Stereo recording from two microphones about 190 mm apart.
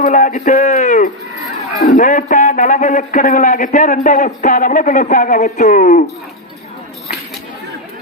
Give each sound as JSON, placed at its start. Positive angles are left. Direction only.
{"t": 0.0, "sound": "a man's voice", "side_deg": 45}